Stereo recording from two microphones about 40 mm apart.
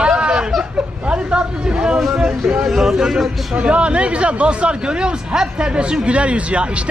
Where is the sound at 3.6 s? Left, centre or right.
Right.